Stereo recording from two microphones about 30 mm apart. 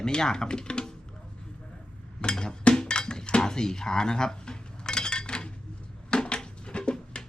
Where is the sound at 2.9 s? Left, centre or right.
Left.